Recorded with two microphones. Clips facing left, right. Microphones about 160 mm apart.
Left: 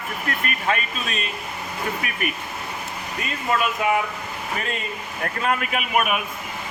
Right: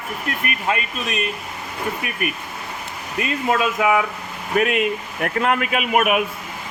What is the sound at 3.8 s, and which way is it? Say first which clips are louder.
Speech: right 4 dB; 90° right.